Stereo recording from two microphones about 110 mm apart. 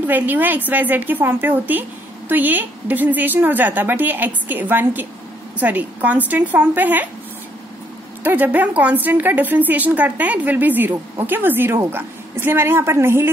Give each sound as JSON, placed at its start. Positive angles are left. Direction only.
{"t": 0.0, "sound": "a woman's voice", "side_deg": -15}
{"t": 8.2, "sound": "a woman's voice", "side_deg": -15}